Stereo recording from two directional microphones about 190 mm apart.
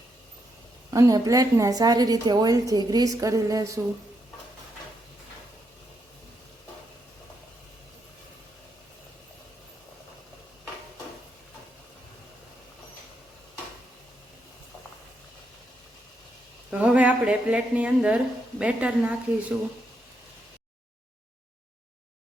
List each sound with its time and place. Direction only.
0.9 s a woman's voice: 20° right (ahead or behind)
16.7 s a woman's voice: 5° right (ahead or behind)